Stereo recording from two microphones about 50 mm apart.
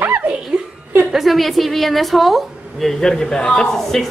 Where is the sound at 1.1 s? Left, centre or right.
Centre.